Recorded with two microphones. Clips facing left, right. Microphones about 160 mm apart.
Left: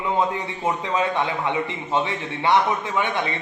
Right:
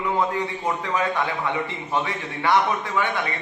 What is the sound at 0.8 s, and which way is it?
A man's voice, 20° left (ahead or behind).